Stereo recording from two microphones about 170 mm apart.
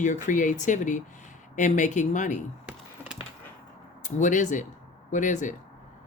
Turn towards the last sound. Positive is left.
turn(degrees=50)  # may be behind; listen again after turning